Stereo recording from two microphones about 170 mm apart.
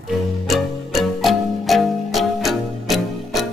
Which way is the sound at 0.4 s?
Centre (ahead or behind).